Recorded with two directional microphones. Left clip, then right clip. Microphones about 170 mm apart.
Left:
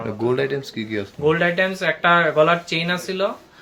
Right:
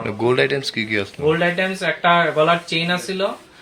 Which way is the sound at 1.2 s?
35° left (ahead or behind).